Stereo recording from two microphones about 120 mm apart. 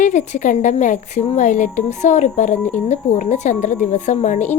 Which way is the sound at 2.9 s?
75° left (ahead or behind).